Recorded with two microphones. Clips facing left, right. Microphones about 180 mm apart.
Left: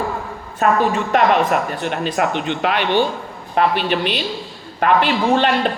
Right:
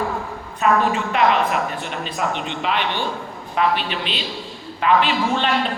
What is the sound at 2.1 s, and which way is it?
A man's voice, 60° left (ahead or behind).